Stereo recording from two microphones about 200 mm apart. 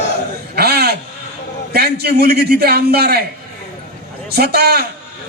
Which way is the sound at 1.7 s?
50° right (ahead or behind).